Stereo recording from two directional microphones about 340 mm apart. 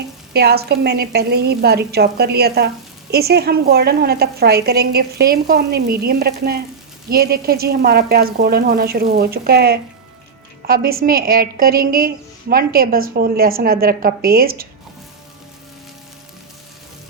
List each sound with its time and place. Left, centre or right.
0.3 s a woman's voice: right